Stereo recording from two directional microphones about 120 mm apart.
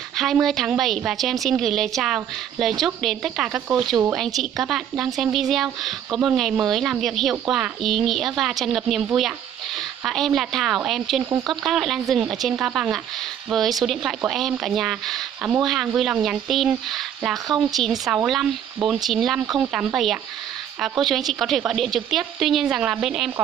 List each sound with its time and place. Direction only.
0.2 s speech: centre (ahead or behind)